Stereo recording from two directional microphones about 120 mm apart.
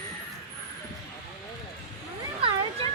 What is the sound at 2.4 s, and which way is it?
Cat, 50° right (ahead or behind).